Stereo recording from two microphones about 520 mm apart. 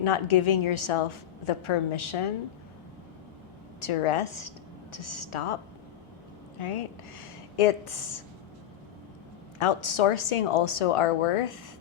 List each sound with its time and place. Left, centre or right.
0.0 s a woman's voice: left
3.8 s speech: left
6.6 s a woman's voice: left
9.6 s a woman's voice: left